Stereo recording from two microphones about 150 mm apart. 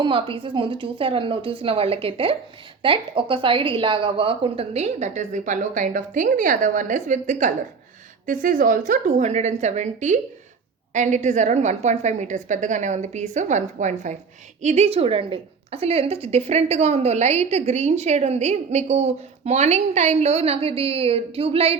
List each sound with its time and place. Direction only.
0.0 s a woman's voice: 35° right (ahead or behind)